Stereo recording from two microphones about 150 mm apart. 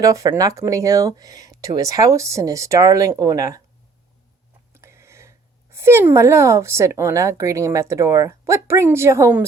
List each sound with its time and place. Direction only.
0.0 s speech: 20° right (ahead or behind)
4.7 s a sound: 20° right (ahead or behind)
5.7 s speech: 15° right (ahead or behind)